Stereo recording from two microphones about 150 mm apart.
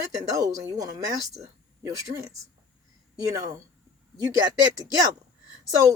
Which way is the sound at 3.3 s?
25° right (ahead or behind).